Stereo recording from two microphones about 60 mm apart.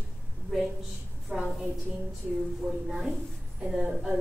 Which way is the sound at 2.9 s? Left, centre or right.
Centre.